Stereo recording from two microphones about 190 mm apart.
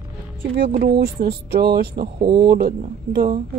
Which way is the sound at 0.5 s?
55° right (ahead or behind).